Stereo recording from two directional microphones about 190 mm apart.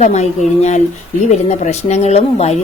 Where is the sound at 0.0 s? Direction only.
35° left (ahead or behind).